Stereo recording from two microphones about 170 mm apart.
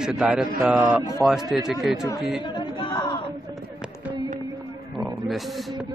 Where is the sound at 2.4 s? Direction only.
25° left (ahead or behind).